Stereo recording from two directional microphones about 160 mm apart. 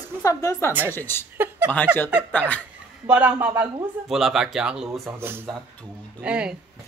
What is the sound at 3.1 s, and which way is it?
Speech, 10° right (ahead or behind).